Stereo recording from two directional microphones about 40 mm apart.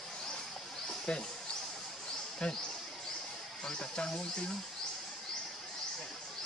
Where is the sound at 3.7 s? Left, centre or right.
Left.